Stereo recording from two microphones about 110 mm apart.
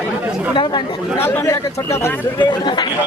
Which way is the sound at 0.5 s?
50° left (ahead or behind).